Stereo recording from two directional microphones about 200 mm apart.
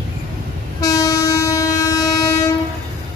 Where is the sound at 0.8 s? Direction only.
15° left (ahead or behind).